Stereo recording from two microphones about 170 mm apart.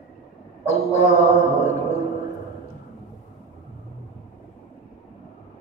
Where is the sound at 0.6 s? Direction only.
40° left (ahead or behind).